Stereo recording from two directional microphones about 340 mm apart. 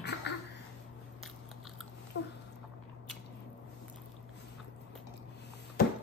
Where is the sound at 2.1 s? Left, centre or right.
Left.